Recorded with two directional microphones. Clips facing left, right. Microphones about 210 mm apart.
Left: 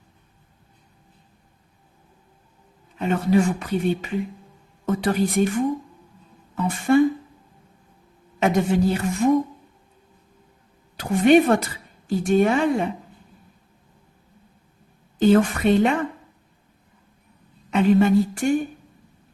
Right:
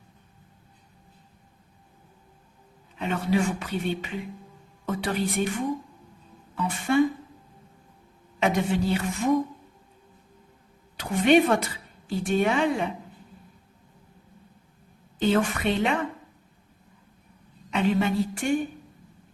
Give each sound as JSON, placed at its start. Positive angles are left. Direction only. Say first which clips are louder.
{"t": 3.0, "sound": "speech", "louder": "left 5 dB", "side_deg": 45}
{"t": 6.6, "sound": "speech", "louder": "left 6 dB", "side_deg": 45}
{"t": 8.4, "sound": "speech", "louder": "left 5 dB", "side_deg": 45}
{"t": 10.9, "sound": "speech", "louder": "left 4 dB", "side_deg": 45}
{"t": 15.2, "sound": "speech", "louder": "left 6 dB", "side_deg": 45}
{"t": 17.7, "sound": "speech", "louder": "left 7 dB", "side_deg": 45}